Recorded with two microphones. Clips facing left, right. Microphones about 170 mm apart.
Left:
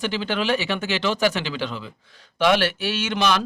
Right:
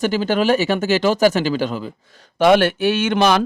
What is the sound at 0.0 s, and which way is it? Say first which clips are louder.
A man's voice: right 7 dB; 45° right (ahead or behind).